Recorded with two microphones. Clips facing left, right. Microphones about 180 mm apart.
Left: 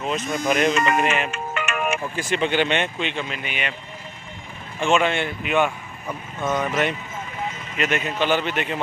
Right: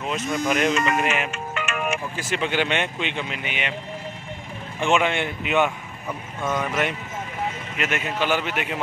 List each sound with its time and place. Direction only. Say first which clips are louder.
0.0 s speech: left 1 dB; 5° right (ahead or behind)
1.3 s music: left 2 dB; 60° left (ahead or behind)
2.1 s speech: left 4 dB; 5° right (ahead or behind); by 3.7 s 20° right (ahead or behind)
4.7 s speech: left 1 dB; 15° right (ahead or behind)
6.0 s speech: left 2 dB; centre (ahead or behind)